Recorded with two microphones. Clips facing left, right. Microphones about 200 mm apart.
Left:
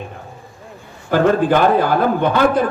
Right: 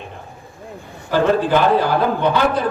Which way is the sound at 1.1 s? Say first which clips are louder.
Left 2 dB; 50° left (ahead or behind).